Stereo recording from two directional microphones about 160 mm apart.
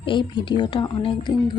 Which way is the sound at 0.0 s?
30° left (ahead or behind).